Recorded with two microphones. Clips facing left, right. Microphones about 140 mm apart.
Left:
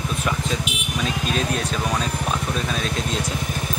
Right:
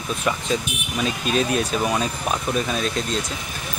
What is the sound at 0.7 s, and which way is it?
Speech, 90° left.